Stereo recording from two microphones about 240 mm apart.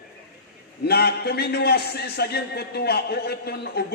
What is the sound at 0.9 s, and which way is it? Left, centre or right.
A man's voice, left.